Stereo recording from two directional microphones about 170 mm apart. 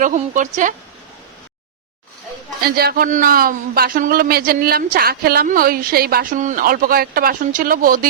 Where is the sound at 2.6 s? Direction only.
65° right (ahead or behind).